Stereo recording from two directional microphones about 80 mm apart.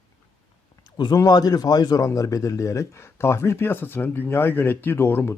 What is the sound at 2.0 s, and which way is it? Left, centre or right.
Speech, left.